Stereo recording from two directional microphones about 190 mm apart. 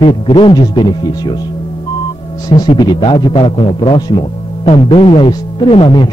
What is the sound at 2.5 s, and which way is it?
Speech, 25° left (ahead or behind).